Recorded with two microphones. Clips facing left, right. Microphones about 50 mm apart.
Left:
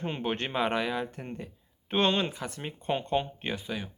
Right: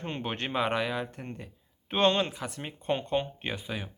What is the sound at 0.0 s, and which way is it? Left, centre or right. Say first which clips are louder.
Speech: left 2 dB; centre.